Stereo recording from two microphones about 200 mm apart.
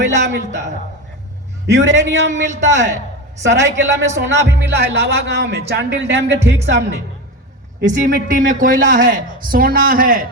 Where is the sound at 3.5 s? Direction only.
65° right (ahead or behind).